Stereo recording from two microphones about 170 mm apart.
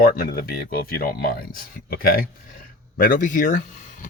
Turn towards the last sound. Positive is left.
turn(degrees=50)  # may be behind; listen again after turning